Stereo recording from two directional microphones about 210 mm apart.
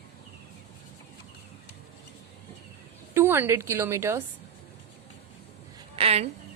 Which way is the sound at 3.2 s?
10° right (ahead or behind).